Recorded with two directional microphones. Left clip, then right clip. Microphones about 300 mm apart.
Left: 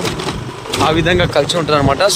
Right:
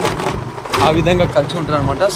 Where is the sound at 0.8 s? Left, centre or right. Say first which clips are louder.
Left 1 dB; centre.